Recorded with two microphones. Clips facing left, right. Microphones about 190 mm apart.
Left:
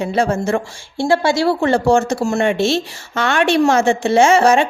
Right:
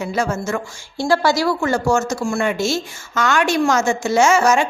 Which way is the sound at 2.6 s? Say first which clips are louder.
Left 4 dB; 60° left (ahead or behind).